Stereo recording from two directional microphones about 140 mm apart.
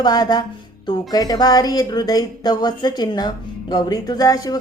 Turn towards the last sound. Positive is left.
turn(degrees=25)  # may be behind; listen again after turning